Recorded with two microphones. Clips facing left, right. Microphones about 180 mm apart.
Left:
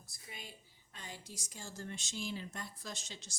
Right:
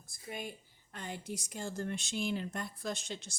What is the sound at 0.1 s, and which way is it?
A woman's voice, 55° right (ahead or behind).